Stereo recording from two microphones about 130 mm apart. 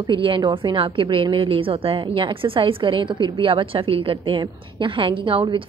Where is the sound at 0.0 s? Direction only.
40° right (ahead or behind).